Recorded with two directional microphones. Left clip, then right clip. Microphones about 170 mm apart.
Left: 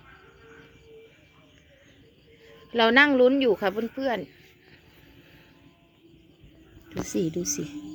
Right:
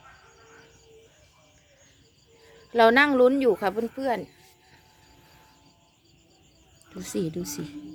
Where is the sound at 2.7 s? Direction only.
15° right (ahead or behind).